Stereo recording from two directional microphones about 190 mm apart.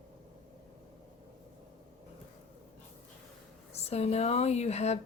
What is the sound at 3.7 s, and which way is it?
Speech, 35° left (ahead or behind).